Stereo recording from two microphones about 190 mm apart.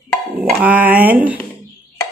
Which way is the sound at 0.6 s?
10° right (ahead or behind).